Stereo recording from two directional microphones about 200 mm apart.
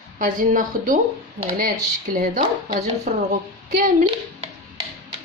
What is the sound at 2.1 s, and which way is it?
A woman's voice, 40° right (ahead or behind).